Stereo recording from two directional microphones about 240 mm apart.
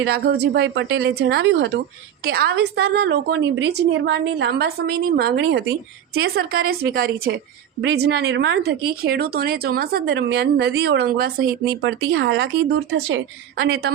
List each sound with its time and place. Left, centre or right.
0.0 s a woman's voice: right